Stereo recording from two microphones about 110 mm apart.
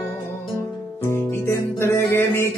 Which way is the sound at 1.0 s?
25° left (ahead or behind).